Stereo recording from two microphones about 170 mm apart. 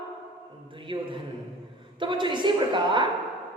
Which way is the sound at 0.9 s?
30° right (ahead or behind).